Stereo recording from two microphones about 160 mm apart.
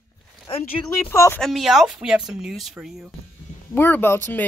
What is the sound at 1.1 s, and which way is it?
Speech, 15° left (ahead or behind).